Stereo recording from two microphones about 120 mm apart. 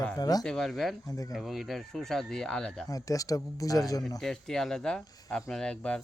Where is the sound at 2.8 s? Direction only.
30° left (ahead or behind).